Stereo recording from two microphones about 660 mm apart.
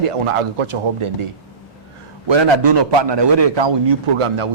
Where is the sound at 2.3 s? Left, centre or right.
Right.